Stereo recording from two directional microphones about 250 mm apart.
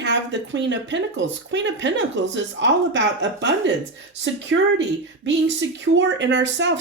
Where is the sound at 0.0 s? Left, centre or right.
Right.